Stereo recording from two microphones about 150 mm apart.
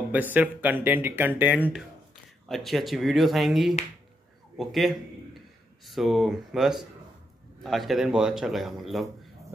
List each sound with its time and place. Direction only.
0.1 s speech: 10° right (ahead or behind)
2.4 s a man's voice: centre (ahead or behind)